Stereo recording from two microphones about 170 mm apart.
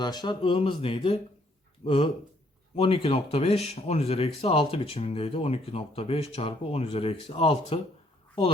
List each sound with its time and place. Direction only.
0.0 s speech: 25° left (ahead or behind)